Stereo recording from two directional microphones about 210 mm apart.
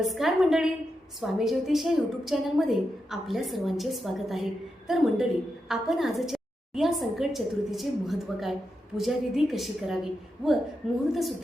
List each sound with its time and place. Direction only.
0.0 s a woman's voice: centre (ahead or behind)